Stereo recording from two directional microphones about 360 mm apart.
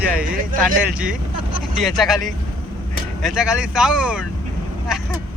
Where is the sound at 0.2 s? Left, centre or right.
Right.